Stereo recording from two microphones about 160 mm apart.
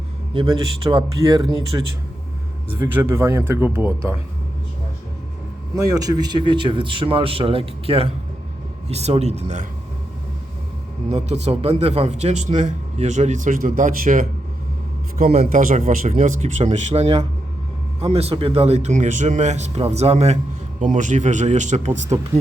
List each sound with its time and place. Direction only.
0.3 s speech: 35° right (ahead or behind)
2.9 s speech: 15° right (ahead or behind)
5.7 s a man's voice: 25° right (ahead or behind); by 9.6 s 45° right (ahead or behind)
11.1 s a man's voice: 40° right (ahead or behind); by 14.3 s 60° right (ahead or behind)
15.3 s speech: 40° right (ahead or behind)
15.6 s a man's voice: 55° right (ahead or behind)